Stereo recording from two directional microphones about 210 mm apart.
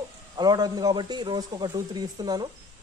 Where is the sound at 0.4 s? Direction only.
20° right (ahead or behind).